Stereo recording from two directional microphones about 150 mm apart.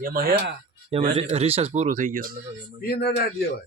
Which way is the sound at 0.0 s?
75° right (ahead or behind).